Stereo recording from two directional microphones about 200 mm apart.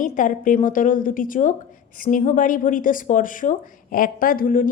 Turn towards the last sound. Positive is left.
turn(degrees=45)  # may be behind; listen again after turning